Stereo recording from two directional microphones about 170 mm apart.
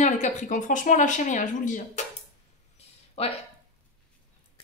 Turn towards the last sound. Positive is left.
turn(degrees=35)  # may be behind; listen again after turning